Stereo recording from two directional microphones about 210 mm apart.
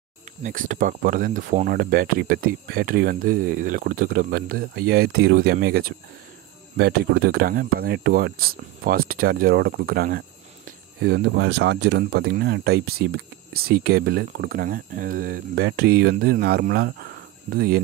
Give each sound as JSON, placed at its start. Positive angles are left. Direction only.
{"t": 0.4, "sound": "speech", "side_deg": -40}